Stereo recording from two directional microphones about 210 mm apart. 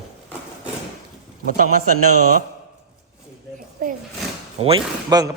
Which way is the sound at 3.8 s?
40° right (ahead or behind).